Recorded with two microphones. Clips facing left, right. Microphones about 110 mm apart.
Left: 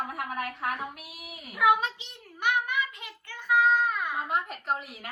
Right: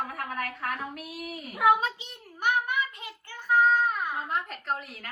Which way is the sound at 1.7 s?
35° right (ahead or behind).